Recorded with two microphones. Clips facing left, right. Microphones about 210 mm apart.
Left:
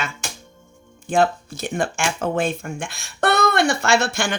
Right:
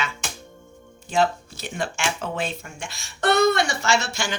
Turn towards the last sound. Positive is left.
turn(degrees=55)  # may be behind; listen again after turning